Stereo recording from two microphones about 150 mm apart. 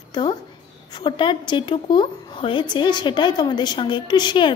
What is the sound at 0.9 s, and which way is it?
A woman's voice, 30° left (ahead or behind).